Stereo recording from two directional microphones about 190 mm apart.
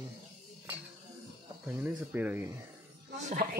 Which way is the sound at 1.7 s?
10° right (ahead or behind).